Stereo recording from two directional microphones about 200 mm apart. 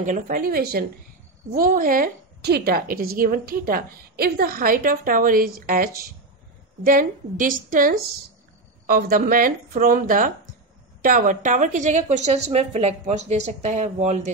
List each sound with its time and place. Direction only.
0.0 s a woman's voice: 40° right (ahead or behind)